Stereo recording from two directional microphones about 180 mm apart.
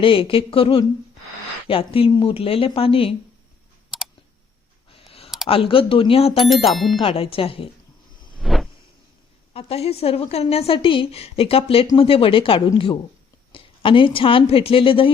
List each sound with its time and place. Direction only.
0.0 s a woman's voice: 30° left (ahead or behind)
4.9 s a sound: 30° left (ahead or behind)
5.5 s a woman's voice: 30° left (ahead or behind)
6.7 s speech: centre (ahead or behind)
7.0 s a woman's voice: 30° left (ahead or behind)
8.4 s a sound: centre (ahead or behind)
9.5 s a woman's voice: 35° left (ahead or behind)